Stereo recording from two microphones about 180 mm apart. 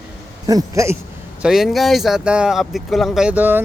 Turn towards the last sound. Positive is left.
turn(degrees=-10)  # may be behind; listen again after turning